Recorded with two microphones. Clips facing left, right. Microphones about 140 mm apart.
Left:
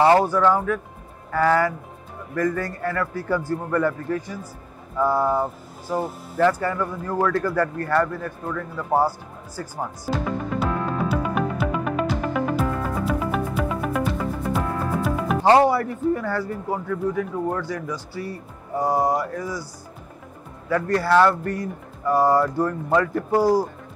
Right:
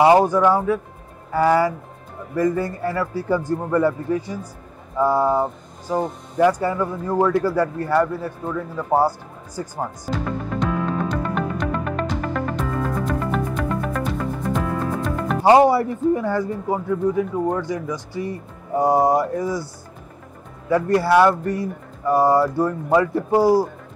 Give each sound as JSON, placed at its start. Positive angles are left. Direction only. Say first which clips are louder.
{"t": 0.0, "sound": "a man's voice", "louder": "right 2 dB", "side_deg": -15}
{"t": 10.1, "sound": "speech", "louder": "left 2 dB", "side_deg": 0}
{"t": 10.6, "sound": "music", "louder": "right 3 dB", "side_deg": 5}
{"t": 15.4, "sound": "a man's voice", "louder": "right 3 dB", "side_deg": -15}
{"t": 20.7, "sound": "a man's voice", "louder": "right 3 dB", "side_deg": -15}